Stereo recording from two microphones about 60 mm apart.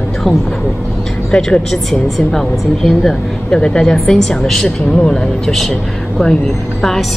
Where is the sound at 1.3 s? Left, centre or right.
Centre.